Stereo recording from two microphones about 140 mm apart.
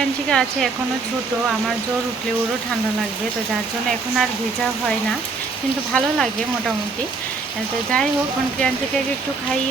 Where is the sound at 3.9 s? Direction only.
Centre (ahead or behind).